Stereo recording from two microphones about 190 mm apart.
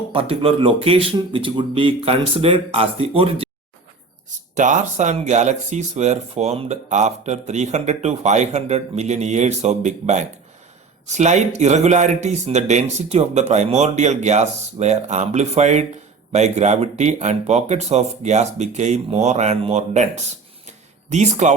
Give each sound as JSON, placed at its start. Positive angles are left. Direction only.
{"t": 0.1, "sound": "speech", "side_deg": -30}
{"t": 4.5, "sound": "speech", "side_deg": -40}
{"t": 20.7, "sound": "a sound", "side_deg": -35}